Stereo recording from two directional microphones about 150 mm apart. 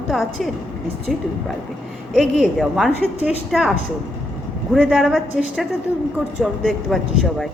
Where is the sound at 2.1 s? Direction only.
Centre (ahead or behind).